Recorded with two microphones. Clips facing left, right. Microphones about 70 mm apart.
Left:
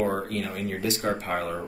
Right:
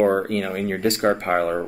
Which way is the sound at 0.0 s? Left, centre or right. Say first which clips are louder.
Right 8 dB; right.